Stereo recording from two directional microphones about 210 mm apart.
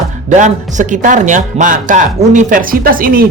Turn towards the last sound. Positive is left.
turn(degrees=-45)  # may be behind; listen again after turning